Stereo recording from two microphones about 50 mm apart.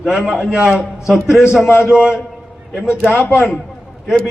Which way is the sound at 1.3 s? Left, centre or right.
Left.